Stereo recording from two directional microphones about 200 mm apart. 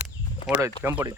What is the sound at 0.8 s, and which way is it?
Speech, 10° right (ahead or behind).